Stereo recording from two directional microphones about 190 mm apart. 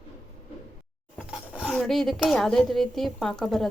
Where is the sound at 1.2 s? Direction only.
5° right (ahead or behind).